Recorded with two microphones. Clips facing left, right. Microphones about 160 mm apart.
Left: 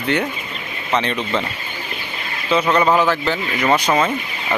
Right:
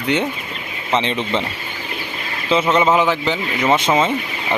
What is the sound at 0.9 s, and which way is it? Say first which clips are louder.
Speech: right 1 dB; 25° right (ahead or behind).